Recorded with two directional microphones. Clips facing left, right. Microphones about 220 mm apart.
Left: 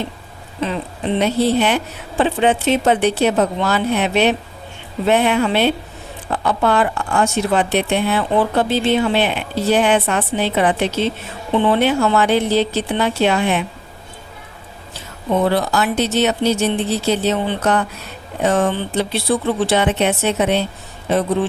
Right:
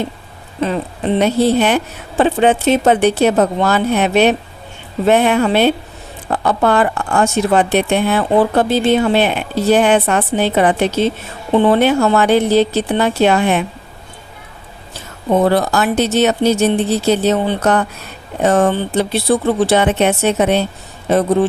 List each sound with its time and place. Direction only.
0.6 s speech: 45° right (ahead or behind)
15.3 s speech: 45° right (ahead or behind)